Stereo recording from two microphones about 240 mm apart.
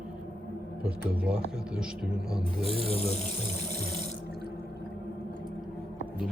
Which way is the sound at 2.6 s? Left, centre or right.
Right.